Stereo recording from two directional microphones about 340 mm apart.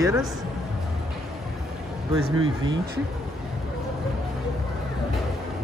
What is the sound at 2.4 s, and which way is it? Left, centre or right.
Speech, right.